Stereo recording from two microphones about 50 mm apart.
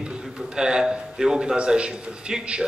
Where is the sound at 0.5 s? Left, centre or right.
Centre.